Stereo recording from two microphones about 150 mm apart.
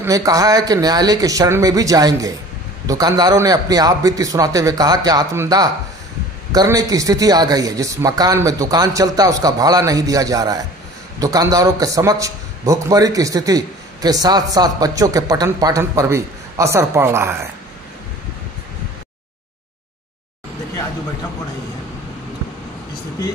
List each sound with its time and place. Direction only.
0.0 s a man's voice: 20° right (ahead or behind)